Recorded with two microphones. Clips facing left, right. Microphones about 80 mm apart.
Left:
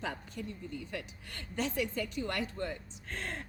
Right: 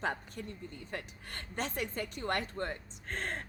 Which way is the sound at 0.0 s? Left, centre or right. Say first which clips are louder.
Right 2 dB; right.